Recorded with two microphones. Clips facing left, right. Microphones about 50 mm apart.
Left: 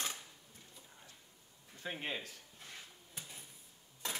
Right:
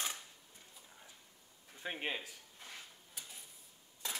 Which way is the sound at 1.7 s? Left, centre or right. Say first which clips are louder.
Right 1 dB; centre.